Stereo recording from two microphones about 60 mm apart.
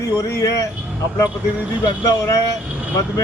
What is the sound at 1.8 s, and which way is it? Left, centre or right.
Speech, left.